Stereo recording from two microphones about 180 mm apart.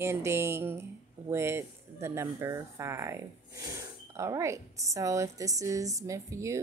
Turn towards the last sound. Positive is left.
turn(degrees=-15)  # may be behind; listen again after turning